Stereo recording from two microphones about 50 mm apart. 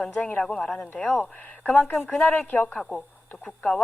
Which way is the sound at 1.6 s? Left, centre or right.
Centre.